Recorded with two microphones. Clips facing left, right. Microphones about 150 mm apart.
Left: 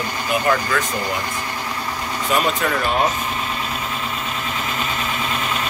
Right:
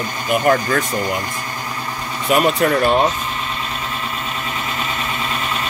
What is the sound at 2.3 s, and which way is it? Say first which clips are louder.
Speech: right 5 dB; 45° right (ahead or behind).